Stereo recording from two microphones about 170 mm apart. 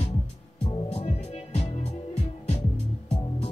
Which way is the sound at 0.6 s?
30° left (ahead or behind).